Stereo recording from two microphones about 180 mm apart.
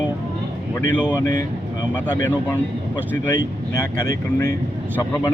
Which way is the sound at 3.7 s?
20° left (ahead or behind).